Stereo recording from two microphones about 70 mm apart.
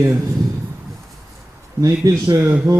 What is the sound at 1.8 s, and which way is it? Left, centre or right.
A man's voice, right.